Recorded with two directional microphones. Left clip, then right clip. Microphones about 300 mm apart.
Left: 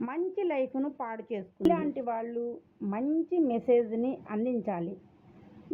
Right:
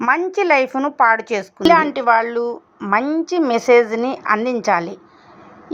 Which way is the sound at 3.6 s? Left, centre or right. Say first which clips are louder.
Right 15 dB; right.